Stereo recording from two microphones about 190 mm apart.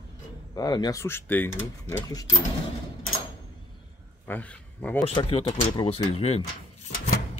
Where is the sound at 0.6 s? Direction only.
20° left (ahead or behind).